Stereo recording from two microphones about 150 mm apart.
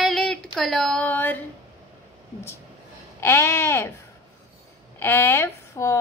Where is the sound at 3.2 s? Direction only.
15° left (ahead or behind).